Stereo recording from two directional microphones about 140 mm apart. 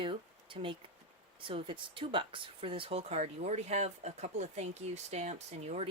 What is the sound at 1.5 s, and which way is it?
Speech, 40° right (ahead or behind).